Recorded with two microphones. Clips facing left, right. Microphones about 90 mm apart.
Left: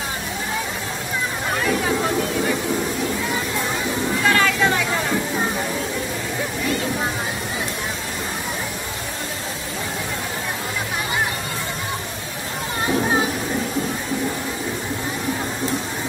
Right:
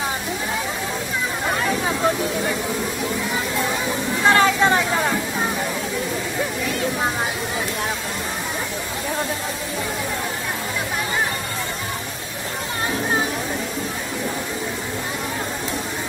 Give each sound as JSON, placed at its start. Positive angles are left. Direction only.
{"t": 4.3, "sound": "vehicle", "side_deg": -30}